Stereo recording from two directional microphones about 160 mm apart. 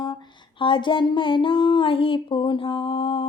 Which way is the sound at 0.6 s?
30° left (ahead or behind).